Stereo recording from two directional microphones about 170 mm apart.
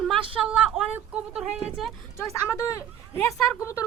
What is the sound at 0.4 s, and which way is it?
Speech, 5° right (ahead or behind).